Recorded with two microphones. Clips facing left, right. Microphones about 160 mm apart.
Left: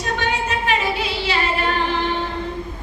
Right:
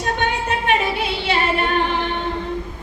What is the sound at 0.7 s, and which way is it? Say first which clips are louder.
Music: right 3 dB; 55° right (ahead or behind).